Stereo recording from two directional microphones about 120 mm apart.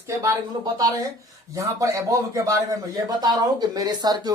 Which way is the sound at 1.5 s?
25° right (ahead or behind).